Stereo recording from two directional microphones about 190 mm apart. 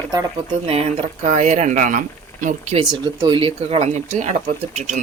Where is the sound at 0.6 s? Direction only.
35° right (ahead or behind).